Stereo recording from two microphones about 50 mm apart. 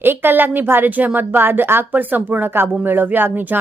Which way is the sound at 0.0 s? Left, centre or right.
Right.